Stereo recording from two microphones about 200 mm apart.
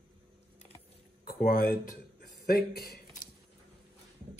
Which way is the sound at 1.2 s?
45° left (ahead or behind).